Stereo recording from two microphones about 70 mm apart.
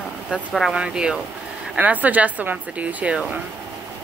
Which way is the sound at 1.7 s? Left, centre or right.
Right.